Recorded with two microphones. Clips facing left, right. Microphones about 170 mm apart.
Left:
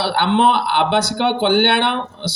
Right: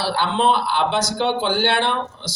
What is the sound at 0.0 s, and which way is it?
Speech, 65° left (ahead or behind).